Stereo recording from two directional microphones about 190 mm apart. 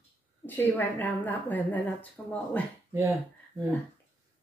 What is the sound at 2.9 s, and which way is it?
Speech, 15° right (ahead or behind).